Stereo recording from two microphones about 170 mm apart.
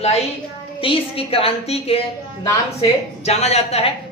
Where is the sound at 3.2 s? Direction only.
40° left (ahead or behind).